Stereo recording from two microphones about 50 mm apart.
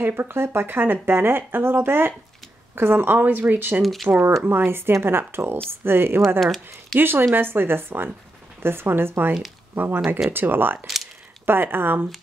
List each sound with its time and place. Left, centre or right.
0.0 s speech: right
3.2 s speech: right
3.8 s speech: centre
4.5 s speech: right
6.4 s speech: centre
7.0 s speech: right